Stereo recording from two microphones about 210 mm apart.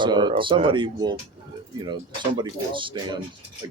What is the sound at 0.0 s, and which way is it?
Speech, 20° right (ahead or behind).